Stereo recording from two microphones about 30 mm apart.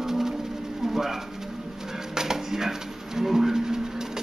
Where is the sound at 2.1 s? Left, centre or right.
Centre.